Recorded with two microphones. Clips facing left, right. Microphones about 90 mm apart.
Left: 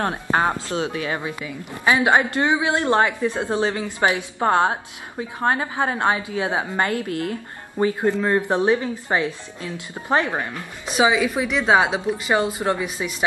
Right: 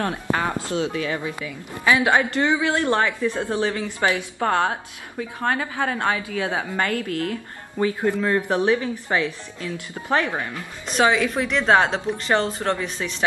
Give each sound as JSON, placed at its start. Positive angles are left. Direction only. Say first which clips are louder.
{"t": 0.0, "sound": "a woman's voice", "louder": "left 3 dB", "side_deg": 30}
{"t": 10.9, "sound": "speech", "louder": "left 1 dB", "side_deg": 5}